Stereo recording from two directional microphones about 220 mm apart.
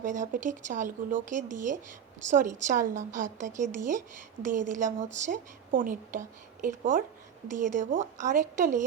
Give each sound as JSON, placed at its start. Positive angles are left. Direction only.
{"t": 0.0, "sound": "a woman's voice", "side_deg": -35}